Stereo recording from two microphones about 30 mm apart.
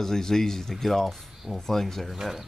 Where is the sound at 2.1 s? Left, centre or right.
Centre.